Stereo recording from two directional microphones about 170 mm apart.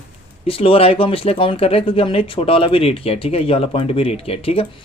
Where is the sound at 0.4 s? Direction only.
35° left (ahead or behind).